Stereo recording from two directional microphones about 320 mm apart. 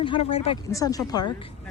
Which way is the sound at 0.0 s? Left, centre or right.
Centre.